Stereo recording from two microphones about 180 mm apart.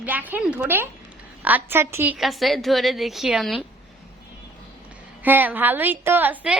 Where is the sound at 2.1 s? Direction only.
Centre (ahead or behind).